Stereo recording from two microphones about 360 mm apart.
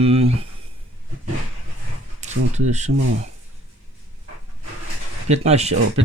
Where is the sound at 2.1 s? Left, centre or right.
Centre.